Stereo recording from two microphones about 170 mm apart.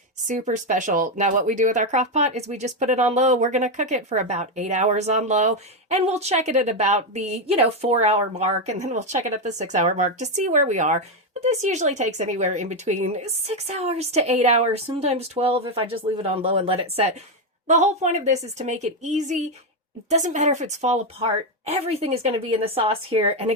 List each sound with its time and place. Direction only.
0.3 s a woman's voice: 45° right (ahead or behind)